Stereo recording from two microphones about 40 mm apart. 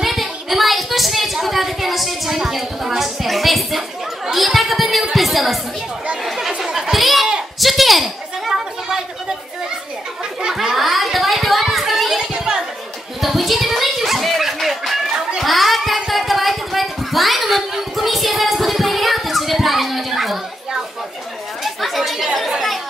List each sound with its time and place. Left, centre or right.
0.0 s a sound: centre
4.3 s speech: centre
6.2 s chatter: centre
7.6 s speech: centre
8.5 s a sound: centre
10.5 s children playing: centre
12.2 s a sound: centre
13.2 s chicken: centre
21.6 s chatter: centre